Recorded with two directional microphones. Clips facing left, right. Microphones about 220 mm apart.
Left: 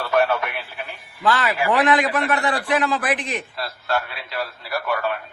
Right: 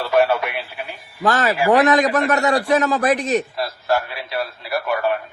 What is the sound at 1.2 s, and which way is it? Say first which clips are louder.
A man's voice: right 3 dB; 45° right (ahead or behind).